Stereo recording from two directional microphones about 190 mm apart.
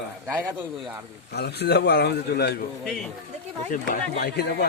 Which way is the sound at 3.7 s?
50° left (ahead or behind).